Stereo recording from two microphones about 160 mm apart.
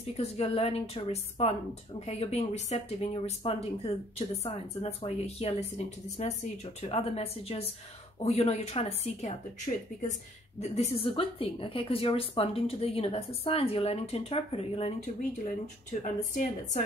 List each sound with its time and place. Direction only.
0.2 s speech: 40° left (ahead or behind)
10.6 s speech: 40° left (ahead or behind)
15.9 s a woman's voice: 50° left (ahead or behind)